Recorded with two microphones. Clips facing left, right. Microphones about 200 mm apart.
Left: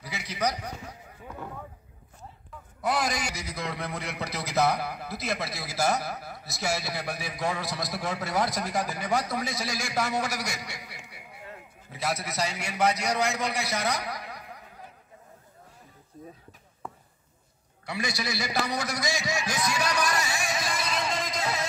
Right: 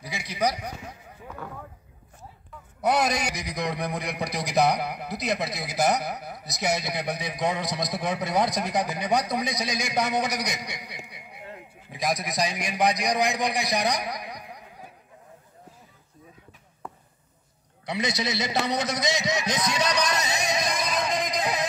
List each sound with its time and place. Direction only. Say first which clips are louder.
0.0 s a sound: right 3 dB; 15° right (ahead or behind)
2.8 s a man's voice: right 4 dB; 20° right (ahead or behind)
16.8 s basketball bounce: even; centre (ahead or behind)
17.8 s a man's voice: right 4 dB; 20° right (ahead or behind)